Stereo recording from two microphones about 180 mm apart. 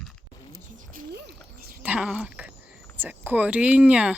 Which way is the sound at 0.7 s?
50° right (ahead or behind).